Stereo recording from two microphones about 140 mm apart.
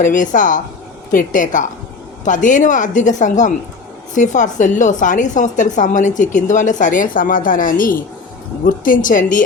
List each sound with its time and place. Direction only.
0.0 s a woman's voice: 65° left (ahead or behind)